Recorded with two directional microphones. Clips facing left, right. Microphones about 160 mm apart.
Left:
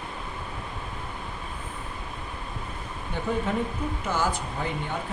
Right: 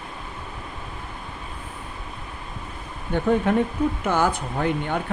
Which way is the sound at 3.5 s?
60° right (ahead or behind).